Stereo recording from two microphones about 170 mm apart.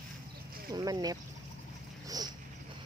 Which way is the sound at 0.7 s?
20° right (ahead or behind).